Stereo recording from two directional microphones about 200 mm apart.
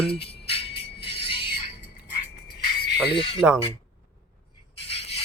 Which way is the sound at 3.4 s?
Centre (ahead or behind).